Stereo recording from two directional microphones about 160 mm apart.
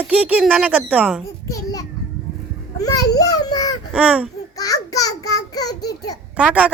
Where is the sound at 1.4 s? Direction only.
20° left (ahead or behind).